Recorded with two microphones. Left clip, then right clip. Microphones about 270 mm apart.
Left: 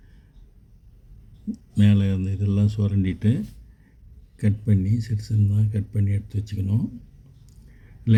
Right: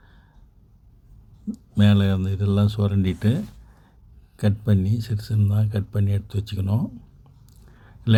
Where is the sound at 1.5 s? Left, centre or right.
Centre.